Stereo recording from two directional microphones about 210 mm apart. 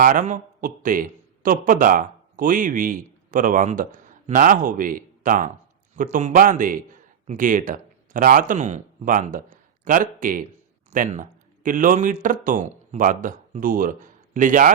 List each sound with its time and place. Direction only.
0.0 s a man's voice: 40° right (ahead or behind)